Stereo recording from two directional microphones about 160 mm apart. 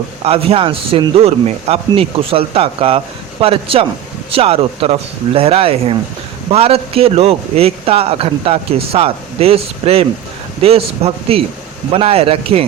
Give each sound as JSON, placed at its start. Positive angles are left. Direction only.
{"t": 0.3, "sound": "a man's voice", "side_deg": -40}